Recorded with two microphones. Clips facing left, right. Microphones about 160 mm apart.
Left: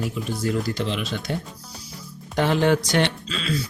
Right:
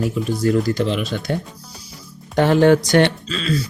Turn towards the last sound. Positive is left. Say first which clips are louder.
# right 6 dB
turn(degrees=-40)  # may be behind; listen again after turning